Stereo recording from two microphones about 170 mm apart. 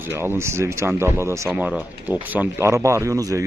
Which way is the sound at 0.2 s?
15° right (ahead or behind).